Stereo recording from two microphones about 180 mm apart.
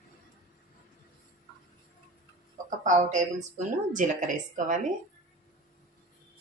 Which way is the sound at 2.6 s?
45° right (ahead or behind).